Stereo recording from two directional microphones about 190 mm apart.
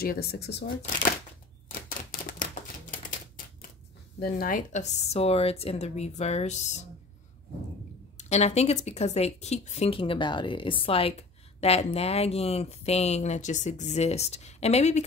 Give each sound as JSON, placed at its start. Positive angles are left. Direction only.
{"t": 0.0, "sound": "speech", "side_deg": 55}
{"t": 1.7, "sound": "typewriter", "side_deg": 50}
{"t": 4.2, "sound": "speech", "side_deg": 45}
{"t": 8.2, "sound": "speech", "side_deg": 35}